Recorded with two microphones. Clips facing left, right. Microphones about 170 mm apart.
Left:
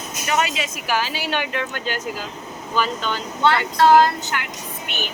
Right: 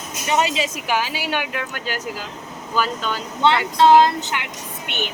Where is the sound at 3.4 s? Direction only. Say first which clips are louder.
Right 1 dB; 20° right (ahead or behind).